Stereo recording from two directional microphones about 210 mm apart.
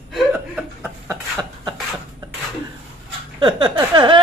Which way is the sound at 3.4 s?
20° right (ahead or behind).